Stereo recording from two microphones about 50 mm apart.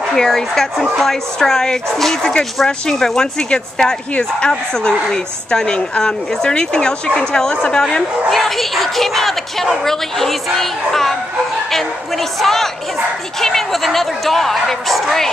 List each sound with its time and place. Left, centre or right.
0.1 s speech: centre
8.3 s a woman's voice: centre